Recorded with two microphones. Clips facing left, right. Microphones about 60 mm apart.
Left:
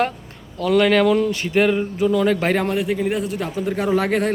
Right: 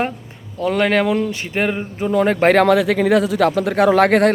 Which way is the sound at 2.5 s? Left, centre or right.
Right.